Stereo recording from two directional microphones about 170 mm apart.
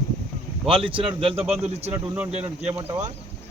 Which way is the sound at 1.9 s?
15° right (ahead or behind).